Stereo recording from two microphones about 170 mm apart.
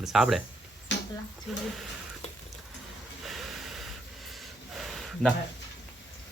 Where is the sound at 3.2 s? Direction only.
Centre (ahead or behind).